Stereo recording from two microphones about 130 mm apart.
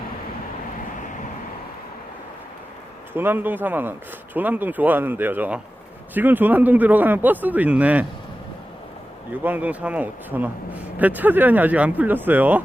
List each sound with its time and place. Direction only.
3.1 s speech: 15° right (ahead or behind)
9.3 s speech: 15° right (ahead or behind)